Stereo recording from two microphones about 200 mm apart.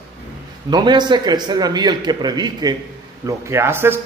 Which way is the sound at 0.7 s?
20° right (ahead or behind).